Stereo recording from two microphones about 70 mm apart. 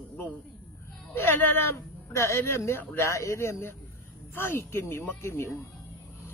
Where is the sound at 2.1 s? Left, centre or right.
Left.